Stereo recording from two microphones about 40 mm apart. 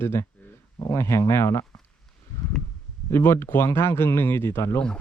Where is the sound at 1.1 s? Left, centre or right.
Left.